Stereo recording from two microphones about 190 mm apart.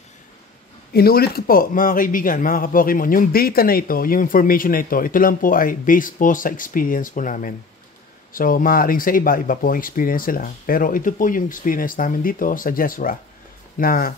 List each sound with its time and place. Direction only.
0.9 s speech: 55° left (ahead or behind)